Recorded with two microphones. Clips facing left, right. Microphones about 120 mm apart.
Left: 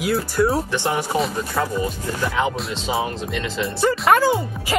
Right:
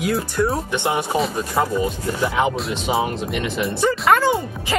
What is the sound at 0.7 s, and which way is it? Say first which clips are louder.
Speech: right 1 dB; 20° right (ahead or behind).